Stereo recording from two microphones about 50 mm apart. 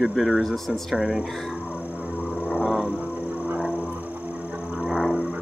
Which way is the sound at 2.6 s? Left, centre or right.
Right.